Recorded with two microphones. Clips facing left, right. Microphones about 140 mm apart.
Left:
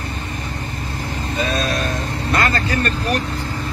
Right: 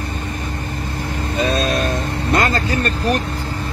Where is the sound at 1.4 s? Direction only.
60° right (ahead or behind); by 2.9 s 45° right (ahead or behind).